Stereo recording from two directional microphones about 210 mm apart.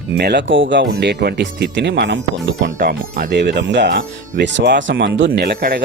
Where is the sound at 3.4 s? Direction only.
55° right (ahead or behind).